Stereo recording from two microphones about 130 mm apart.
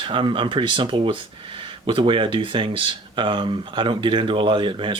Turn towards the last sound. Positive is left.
turn(degrees=-40)  # may be behind; listen again after turning